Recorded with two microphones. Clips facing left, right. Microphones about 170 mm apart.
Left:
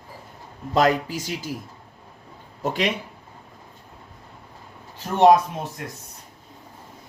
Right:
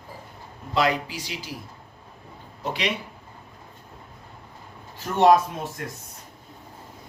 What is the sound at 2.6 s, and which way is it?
Speech, 45° left (ahead or behind).